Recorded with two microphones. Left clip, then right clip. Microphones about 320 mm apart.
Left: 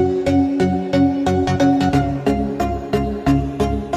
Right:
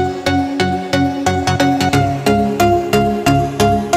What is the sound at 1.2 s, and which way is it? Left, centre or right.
Music, right.